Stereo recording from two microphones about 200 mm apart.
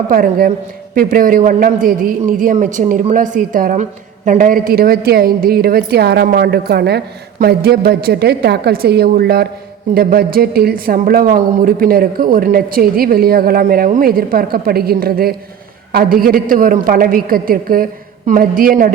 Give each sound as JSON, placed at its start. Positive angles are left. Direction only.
{"t": 0.1, "sound": "a man's voice", "side_deg": -45}